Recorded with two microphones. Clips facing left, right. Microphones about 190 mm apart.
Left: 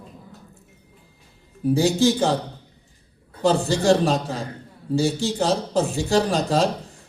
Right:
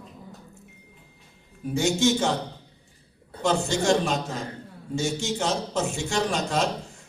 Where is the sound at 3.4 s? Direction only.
35° left (ahead or behind).